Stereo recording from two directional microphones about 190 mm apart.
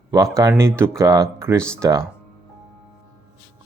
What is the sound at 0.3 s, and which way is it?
Speech, 15° right (ahead or behind).